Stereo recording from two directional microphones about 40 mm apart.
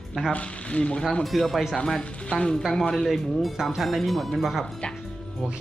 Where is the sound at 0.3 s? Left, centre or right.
Left.